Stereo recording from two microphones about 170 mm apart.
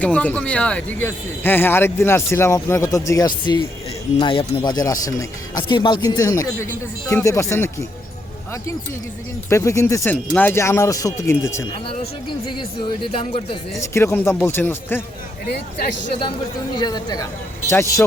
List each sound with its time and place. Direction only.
0.0 s speech: 10° left (ahead or behind)
9.5 s speech: 15° left (ahead or behind)
11.7 s speech: 35° left (ahead or behind)
13.7 s speech: 15° left (ahead or behind)
16.7 s speech: 25° left (ahead or behind)